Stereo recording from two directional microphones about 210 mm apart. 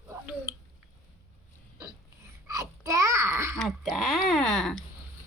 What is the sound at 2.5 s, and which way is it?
Babbling, 15° right (ahead or behind).